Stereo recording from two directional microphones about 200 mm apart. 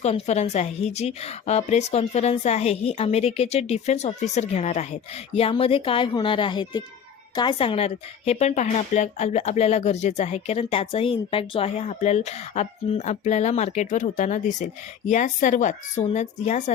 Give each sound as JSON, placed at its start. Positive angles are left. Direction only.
{"t": 0.0, "sound": "a woman's voice", "side_deg": 35}